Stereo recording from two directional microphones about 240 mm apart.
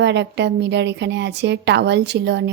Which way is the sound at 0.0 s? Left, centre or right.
Right.